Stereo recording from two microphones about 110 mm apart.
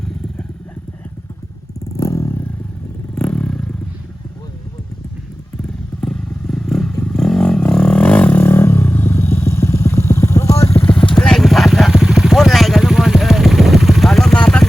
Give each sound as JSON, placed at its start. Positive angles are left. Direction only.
{"t": 2.0, "sound": "vehicle", "side_deg": 25}
{"t": 3.2, "sound": "vehicle", "side_deg": 10}
{"t": 5.6, "sound": "motorcycle", "side_deg": 10}
{"t": 7.0, "sound": "vehicle", "side_deg": 5}
{"t": 11.1, "sound": "vehicle", "side_deg": 5}